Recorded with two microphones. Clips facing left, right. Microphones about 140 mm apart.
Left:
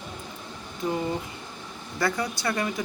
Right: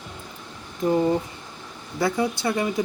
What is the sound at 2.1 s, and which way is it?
Speech, 20° right (ahead or behind).